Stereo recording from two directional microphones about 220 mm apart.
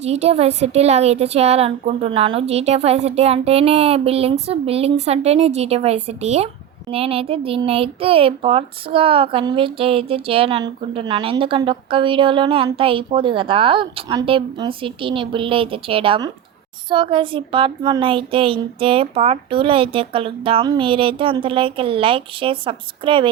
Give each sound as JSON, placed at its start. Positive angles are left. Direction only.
{"t": 0.0, "sound": "a child's voice", "side_deg": -30}